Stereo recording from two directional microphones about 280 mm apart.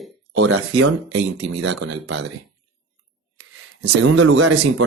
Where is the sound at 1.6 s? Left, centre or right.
Right.